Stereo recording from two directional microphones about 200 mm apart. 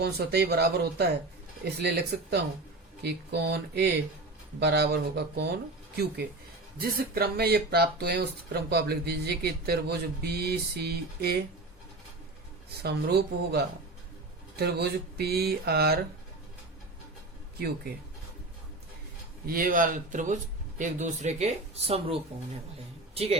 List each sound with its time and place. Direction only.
0.0 s speech: 55° right (ahead or behind)
6.7 s speech: 50° right (ahead or behind)
12.8 s speech: 55° right (ahead or behind)
19.5 s speech: 45° right (ahead or behind)